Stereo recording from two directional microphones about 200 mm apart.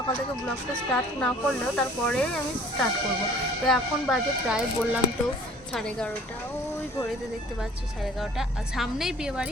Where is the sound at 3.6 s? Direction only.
Centre (ahead or behind).